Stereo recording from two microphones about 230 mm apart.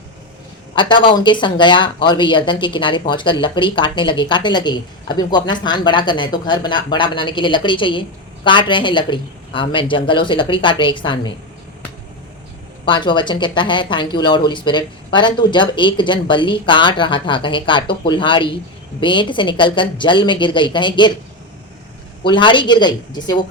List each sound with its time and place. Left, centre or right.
0.8 s speech: left
12.8 s speech: left
22.2 s speech: left